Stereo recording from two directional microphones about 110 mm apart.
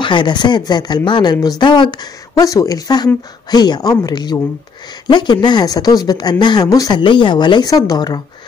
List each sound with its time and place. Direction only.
0.0 s speech: 45° left (ahead or behind)
7.0 s speech: 50° left (ahead or behind)